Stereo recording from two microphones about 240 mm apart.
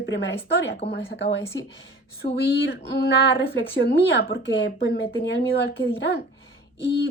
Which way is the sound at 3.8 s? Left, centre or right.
Left.